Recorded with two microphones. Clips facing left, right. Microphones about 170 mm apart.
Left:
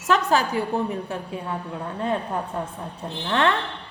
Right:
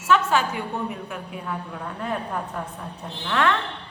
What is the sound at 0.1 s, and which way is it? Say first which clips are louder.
A woman's voice: even; 35° left (ahead or behind).